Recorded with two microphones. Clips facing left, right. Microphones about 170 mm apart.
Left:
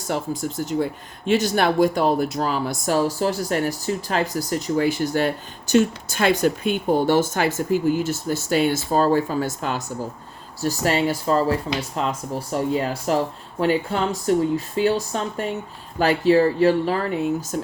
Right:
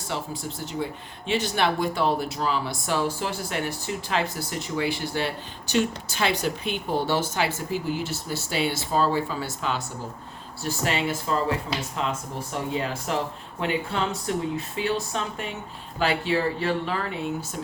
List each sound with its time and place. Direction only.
0.1 s speech: 45° left (ahead or behind)